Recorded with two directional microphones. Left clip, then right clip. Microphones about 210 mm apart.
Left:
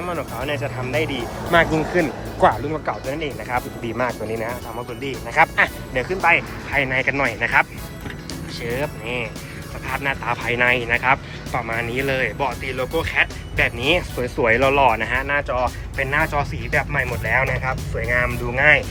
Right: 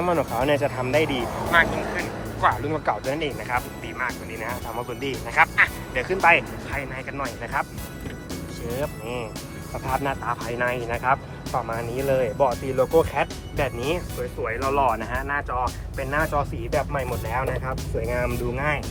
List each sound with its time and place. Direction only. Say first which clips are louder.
0.0 s speech: right 4 dB; centre (ahead or behind)
1.5 s speech: left 4 dB; 15° left (ahead or behind)
2.5 s speech: left 1 dB; 5° left (ahead or behind)
3.8 s speech: left 6 dB; 15° left (ahead or behind)
4.4 s speech: left 1 dB; centre (ahead or behind)
5.3 s speech: left 2 dB; 15° left (ahead or behind)
6.2 s speech: even; centre (ahead or behind)
10.2 s speech: left 7 dB; centre (ahead or behind)